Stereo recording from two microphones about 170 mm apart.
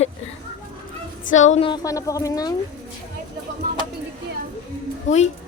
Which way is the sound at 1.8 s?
20° left (ahead or behind).